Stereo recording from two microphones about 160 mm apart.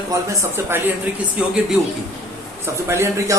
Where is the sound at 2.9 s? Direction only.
15° right (ahead or behind).